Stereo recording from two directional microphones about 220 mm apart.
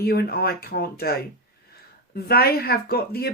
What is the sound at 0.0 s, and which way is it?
Speech, 45° left (ahead or behind).